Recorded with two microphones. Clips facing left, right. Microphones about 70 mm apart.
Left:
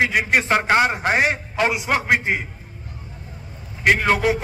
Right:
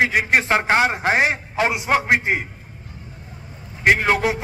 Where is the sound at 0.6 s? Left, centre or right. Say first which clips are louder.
Even; centre.